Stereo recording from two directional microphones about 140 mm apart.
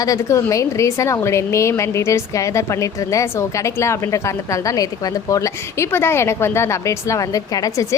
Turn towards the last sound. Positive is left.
turn(degrees=25)  # may be behind; listen again after turning